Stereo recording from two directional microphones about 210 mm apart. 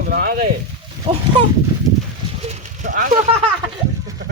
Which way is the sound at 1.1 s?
25° right (ahead or behind).